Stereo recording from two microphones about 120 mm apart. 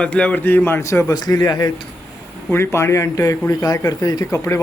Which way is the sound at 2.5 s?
20° left (ahead or behind).